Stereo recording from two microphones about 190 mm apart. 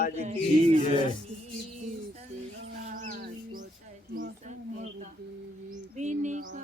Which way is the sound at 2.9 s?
45° right (ahead or behind).